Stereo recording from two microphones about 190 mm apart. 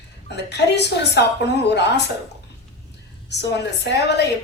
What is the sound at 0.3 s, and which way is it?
A woman's voice, 60° left (ahead or behind).